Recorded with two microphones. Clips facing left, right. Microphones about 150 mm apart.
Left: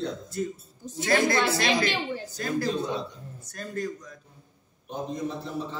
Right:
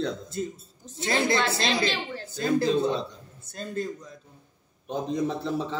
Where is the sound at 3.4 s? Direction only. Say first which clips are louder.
Right 1 dB; 25° right (ahead or behind).